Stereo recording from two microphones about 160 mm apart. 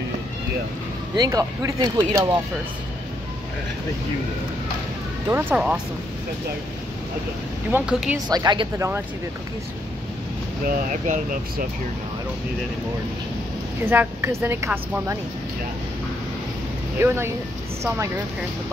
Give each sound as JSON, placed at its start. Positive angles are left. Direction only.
{"t": 1.1, "sound": "speech", "side_deg": -20}
{"t": 5.3, "sound": "a woman's voice", "side_deg": -10}
{"t": 7.7, "sound": "a woman's voice", "side_deg": -5}
{"t": 8.3, "sound": "speech", "side_deg": -25}
{"t": 10.6, "sound": "speech", "side_deg": -55}
{"t": 13.8, "sound": "a woman's voice", "side_deg": -15}
{"t": 17.0, "sound": "a woman's voice", "side_deg": -15}